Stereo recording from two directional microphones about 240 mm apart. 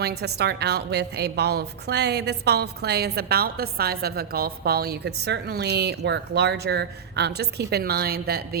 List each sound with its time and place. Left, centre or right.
0.0 s a woman's voice: right